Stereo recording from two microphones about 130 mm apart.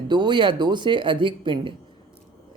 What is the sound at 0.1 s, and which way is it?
Speech, 35° right (ahead or behind).